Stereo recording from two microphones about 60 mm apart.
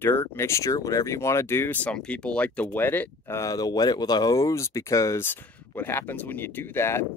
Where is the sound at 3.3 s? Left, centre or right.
Left.